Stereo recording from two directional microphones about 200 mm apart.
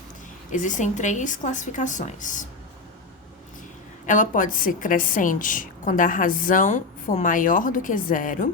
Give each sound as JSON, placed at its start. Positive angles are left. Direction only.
{"t": 0.5, "sound": "a woman's voice", "side_deg": 40}
{"t": 4.0, "sound": "a woman's voice", "side_deg": 40}